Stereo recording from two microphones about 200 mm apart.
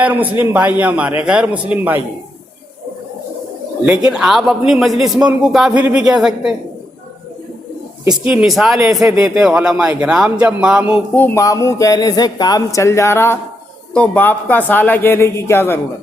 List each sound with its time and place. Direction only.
0.0 s a man's voice: 10° right (ahead or behind)
3.8 s speech: 5° right (ahead or behind)
8.2 s speech: 5° right (ahead or behind)
9.0 s speech: 15° right (ahead or behind)
11.1 s a man's voice: 10° left (ahead or behind)